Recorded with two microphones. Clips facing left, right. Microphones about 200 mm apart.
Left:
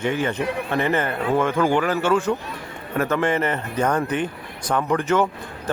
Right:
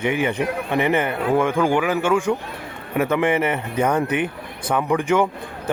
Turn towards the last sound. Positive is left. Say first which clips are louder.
# right 1 dB
turn(degrees=-10)  # may be behind; listen again after turning